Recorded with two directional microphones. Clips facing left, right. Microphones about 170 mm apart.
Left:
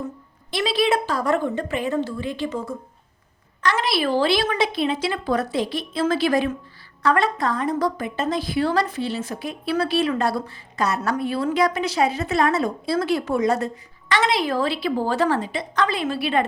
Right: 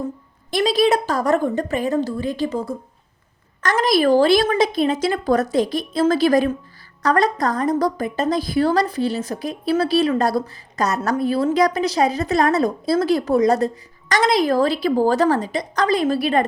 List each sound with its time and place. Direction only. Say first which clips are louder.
0.5 s a woman's voice: right 4 dB; 40° right (ahead or behind)